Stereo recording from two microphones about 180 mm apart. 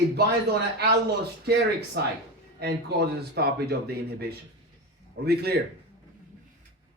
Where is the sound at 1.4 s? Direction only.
65° right (ahead or behind).